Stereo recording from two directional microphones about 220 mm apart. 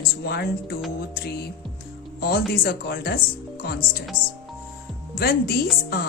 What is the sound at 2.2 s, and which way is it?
Speech, 45° left (ahead or behind).